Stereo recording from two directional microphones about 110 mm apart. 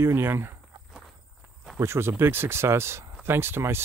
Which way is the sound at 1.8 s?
25° right (ahead or behind).